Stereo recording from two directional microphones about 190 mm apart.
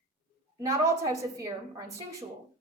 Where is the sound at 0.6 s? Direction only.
15° right (ahead or behind).